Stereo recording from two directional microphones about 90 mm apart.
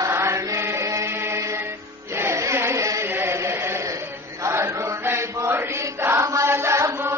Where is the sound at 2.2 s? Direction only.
30° right (ahead or behind).